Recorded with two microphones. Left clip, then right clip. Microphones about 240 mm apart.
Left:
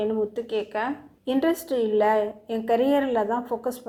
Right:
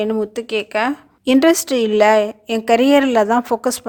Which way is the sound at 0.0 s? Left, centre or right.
Right.